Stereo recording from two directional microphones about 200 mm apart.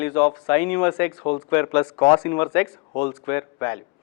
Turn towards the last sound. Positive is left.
turn(degrees=10)  # may be behind; listen again after turning